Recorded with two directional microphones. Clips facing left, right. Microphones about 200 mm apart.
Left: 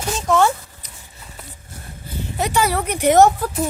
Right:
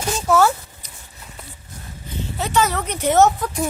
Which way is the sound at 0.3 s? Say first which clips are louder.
Even; 5° right (ahead or behind).